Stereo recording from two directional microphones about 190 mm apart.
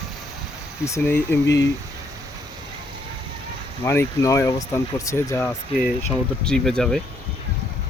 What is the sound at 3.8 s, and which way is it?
Speech, 15° left (ahead or behind).